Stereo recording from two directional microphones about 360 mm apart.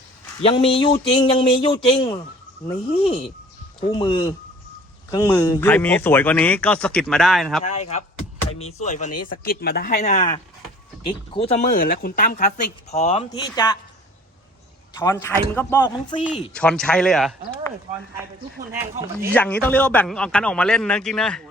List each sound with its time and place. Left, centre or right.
0.4 s speech: centre
3.8 s speech: centre
7.6 s speech: centre
14.9 s speech: centre
18.7 s speech: centre